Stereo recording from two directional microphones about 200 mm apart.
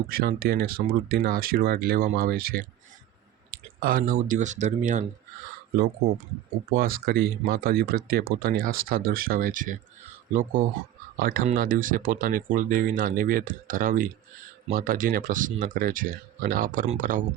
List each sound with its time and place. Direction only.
0.1 s speech: 50° right (ahead or behind)
3.8 s speech: 45° right (ahead or behind)
6.7 s speech: 45° right (ahead or behind)